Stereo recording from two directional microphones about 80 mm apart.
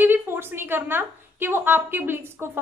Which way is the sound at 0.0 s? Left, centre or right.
Right.